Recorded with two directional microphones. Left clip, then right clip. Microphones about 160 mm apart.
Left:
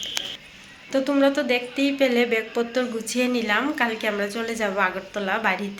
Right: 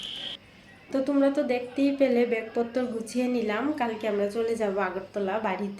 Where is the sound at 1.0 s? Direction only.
10° right (ahead or behind).